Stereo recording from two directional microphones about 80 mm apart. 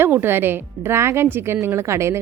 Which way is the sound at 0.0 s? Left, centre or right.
Right.